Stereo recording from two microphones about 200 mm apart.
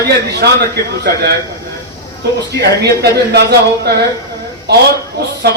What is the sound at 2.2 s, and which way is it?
A man's voice, 55° right (ahead or behind).